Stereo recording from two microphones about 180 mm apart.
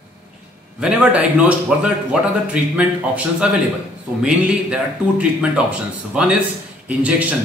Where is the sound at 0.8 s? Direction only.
5° right (ahead or behind).